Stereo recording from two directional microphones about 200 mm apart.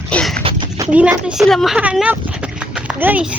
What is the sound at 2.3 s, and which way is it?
Horse, 5° right (ahead or behind).